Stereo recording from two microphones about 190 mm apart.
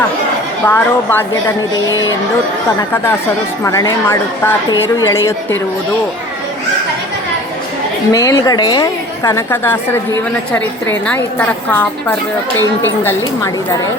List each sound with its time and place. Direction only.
0.6 s a woman's voice: 10° left (ahead or behind)
3.6 s a woman's voice: 15° left (ahead or behind)
8.1 s a woman's voice: 20° left (ahead or behind)